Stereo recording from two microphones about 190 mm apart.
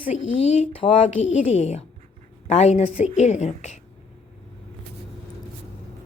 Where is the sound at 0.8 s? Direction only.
25° left (ahead or behind).